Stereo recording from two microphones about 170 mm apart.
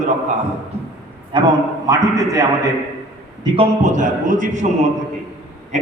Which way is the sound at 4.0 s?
50° right (ahead or behind).